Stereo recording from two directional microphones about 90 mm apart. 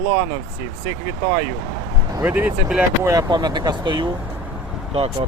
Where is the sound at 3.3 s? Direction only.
50° right (ahead or behind).